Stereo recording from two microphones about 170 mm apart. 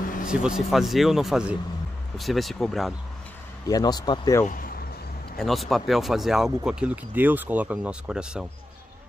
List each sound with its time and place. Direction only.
0.0 s a sound: 50° left (ahead or behind)
0.3 s a man's voice: 5° right (ahead or behind)
3.6 s speech: 20° left (ahead or behind)
4.5 s speech: 55° left (ahead or behind)
5.4 s speech: centre (ahead or behind)